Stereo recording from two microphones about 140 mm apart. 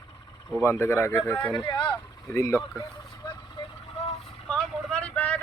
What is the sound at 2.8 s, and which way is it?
Vehicle, 25° left (ahead or behind).